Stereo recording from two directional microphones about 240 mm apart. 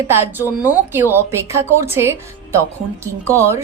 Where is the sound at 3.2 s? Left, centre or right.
Centre.